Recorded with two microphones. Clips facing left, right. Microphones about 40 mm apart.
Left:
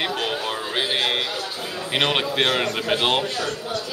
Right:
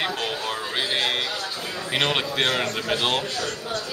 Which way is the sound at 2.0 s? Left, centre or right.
Centre.